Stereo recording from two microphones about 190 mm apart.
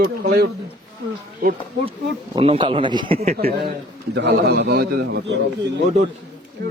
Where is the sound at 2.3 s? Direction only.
30° right (ahead or behind).